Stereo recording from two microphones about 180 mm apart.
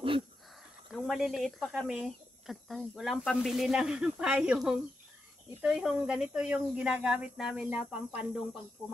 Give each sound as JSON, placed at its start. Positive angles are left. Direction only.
{"t": 0.9, "sound": "speech", "side_deg": 0}